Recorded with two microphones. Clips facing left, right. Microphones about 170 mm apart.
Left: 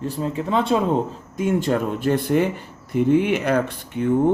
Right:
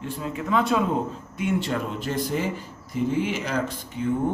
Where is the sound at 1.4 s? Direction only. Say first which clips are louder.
Left 5 dB; 45° left (ahead or behind).